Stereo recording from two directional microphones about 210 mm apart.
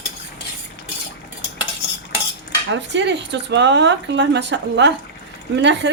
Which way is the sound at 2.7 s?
55° right (ahead or behind).